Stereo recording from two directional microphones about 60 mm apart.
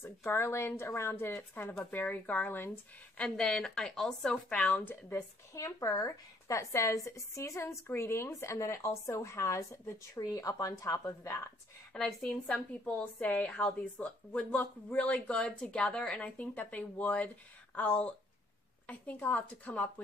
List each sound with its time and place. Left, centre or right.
0.0 s speech: left
3.3 s speech: centre
4.5 s a woman's voice: left
5.5 s speech: left
10.1 s speech: left
10.7 s speech: left
11.9 s a woman's voice: centre